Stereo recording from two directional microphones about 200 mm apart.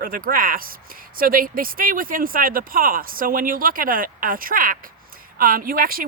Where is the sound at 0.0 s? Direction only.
45° right (ahead or behind).